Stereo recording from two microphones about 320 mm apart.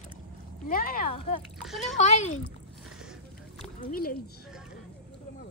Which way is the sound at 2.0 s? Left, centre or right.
Left.